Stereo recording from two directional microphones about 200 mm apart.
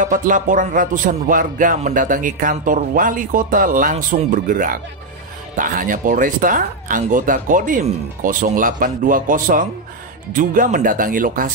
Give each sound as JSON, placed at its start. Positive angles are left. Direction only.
{"t": 0.0, "sound": "music", "side_deg": -40}
{"t": 5.6, "sound": "speech", "side_deg": -40}
{"t": 10.3, "sound": "music", "side_deg": -40}